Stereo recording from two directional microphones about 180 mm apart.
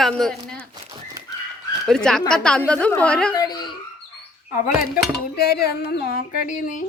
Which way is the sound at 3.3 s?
20° left (ahead or behind).